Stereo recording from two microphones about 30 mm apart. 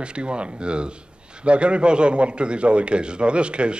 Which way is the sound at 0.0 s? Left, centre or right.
Right.